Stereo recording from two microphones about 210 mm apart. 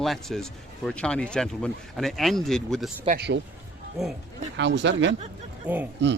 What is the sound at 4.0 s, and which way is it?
Speech, centre (ahead or behind).